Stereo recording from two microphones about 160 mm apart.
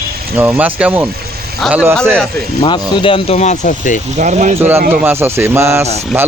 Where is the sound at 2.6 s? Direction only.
30° left (ahead or behind); by 4.0 s 50° left (ahead or behind).